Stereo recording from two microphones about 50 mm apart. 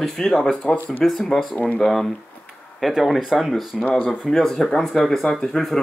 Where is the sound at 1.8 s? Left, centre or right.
Centre.